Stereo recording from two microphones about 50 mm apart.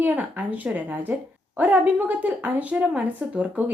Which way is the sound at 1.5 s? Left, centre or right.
Right.